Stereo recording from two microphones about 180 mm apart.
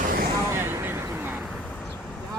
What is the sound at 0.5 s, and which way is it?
Vehicle, 10° right (ahead or behind).